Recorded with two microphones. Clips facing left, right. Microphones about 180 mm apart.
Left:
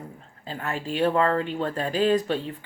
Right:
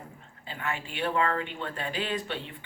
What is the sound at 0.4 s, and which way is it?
Speech, 40° left (ahead or behind).